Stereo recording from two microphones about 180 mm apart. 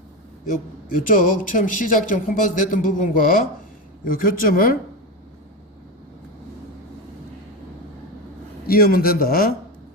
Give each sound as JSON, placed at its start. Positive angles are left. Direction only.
{"t": 0.9, "sound": "speech", "side_deg": 50}
{"t": 8.6, "sound": "a man's voice", "side_deg": 55}